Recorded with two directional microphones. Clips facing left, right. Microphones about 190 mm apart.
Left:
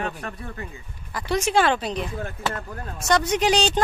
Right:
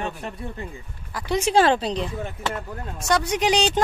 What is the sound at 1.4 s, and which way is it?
Speech, 30° right (ahead or behind).